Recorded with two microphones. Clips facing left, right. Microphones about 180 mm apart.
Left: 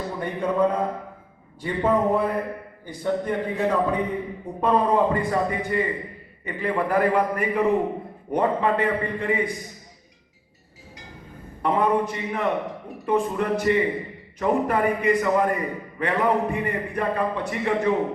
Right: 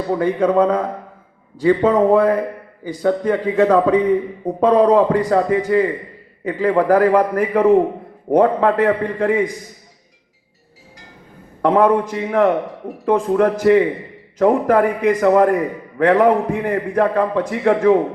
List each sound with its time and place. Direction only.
0.1 s a man's voice: 90° right
11.6 s a man's voice: 90° right